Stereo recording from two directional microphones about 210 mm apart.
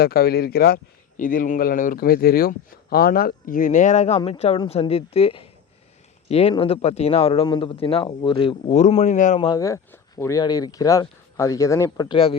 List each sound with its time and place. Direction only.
0.0 s a man's voice: 45° left (ahead or behind)
9.4 s speech: 20° left (ahead or behind)